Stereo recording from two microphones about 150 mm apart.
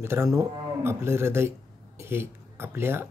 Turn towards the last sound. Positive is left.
turn(degrees=-15)  # may be behind; listen again after turning